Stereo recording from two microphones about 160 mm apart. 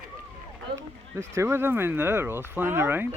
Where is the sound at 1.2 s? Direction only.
15° right (ahead or behind).